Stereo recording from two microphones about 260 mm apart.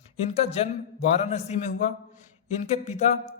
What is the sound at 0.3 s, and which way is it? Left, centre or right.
A man's voice, left.